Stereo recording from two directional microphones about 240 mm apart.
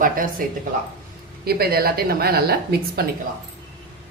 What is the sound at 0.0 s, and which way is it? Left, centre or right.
Speech, right.